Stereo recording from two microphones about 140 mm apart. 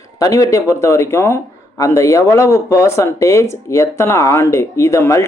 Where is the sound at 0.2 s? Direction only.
25° left (ahead or behind).